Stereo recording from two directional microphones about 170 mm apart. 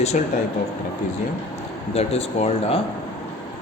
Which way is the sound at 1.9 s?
35° left (ahead or behind).